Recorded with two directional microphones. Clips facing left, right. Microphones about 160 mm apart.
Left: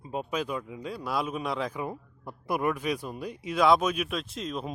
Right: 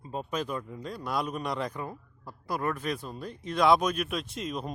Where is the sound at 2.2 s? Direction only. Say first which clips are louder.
Left 3 dB; 20° left (ahead or behind).